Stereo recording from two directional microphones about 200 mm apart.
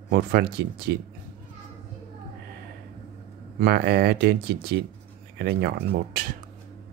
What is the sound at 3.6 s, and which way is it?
Speech, 50° right (ahead or behind).